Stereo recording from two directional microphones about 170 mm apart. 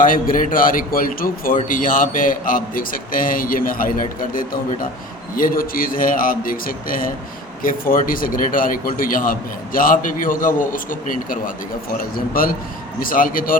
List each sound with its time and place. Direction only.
0.0 s a man's voice: 55° left (ahead or behind)